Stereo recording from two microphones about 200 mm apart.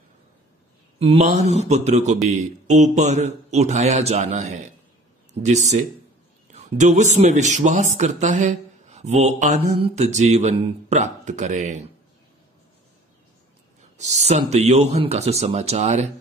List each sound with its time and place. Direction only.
0.9 s speech: 30° right (ahead or behind)
13.9 s speech: 35° right (ahead or behind)